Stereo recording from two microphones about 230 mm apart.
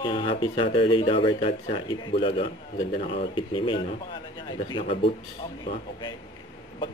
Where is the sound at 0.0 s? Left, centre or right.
Left.